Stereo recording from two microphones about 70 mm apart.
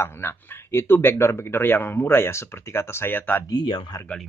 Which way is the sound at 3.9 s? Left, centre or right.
Left.